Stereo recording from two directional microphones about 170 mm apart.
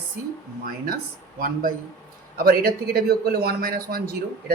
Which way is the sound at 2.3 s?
60° right (ahead or behind).